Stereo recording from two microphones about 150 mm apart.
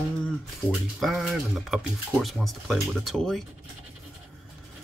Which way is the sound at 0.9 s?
Centre (ahead or behind).